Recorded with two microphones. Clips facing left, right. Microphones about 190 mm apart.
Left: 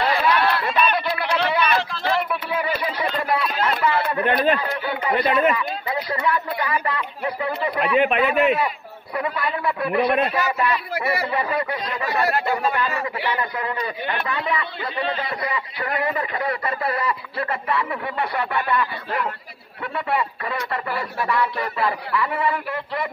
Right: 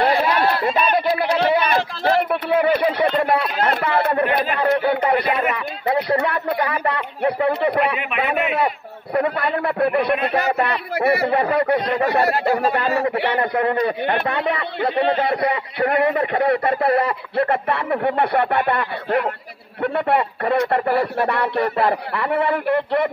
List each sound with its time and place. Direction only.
0.0 s a sound: 40° right (ahead or behind)
2.6 s speech: 60° right (ahead or behind)
9.1 s speech: 55° right (ahead or behind)
12.2 s speech: 35° right (ahead or behind)
13.2 s speech: 60° right (ahead or behind)